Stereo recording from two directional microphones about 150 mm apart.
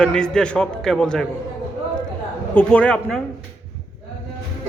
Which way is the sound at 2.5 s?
10° left (ahead or behind).